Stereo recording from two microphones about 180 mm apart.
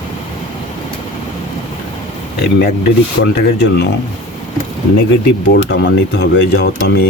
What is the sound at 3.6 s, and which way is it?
Speech, 65° left (ahead or behind).